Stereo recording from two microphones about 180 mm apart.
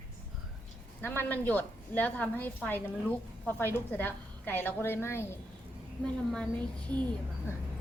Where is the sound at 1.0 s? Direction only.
10° left (ahead or behind).